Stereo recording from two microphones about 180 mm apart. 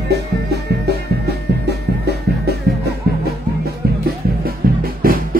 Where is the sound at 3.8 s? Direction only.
60° right (ahead or behind).